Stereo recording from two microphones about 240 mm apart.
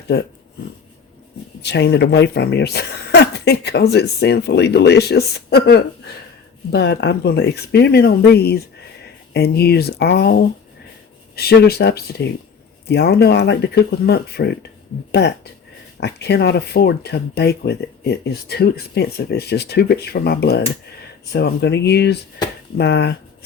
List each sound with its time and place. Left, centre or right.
0.1 s speech: left
1.6 s speech: left